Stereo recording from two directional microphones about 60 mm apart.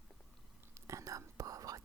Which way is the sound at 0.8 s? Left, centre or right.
Right.